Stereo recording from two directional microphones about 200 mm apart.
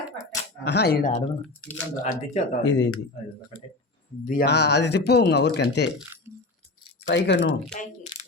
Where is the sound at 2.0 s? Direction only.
40° left (ahead or behind).